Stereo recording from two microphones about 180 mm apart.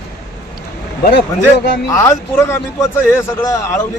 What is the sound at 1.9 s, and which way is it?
A man's voice, 15° left (ahead or behind).